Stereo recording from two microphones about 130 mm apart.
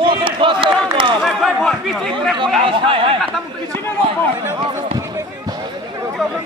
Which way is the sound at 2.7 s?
40° right (ahead or behind).